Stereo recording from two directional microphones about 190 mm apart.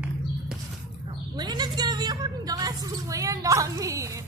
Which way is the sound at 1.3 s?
20° right (ahead or behind).